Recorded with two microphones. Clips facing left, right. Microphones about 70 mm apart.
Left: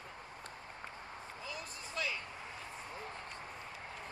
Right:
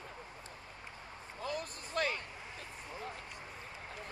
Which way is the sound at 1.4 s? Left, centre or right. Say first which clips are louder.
Right 9 dB; right.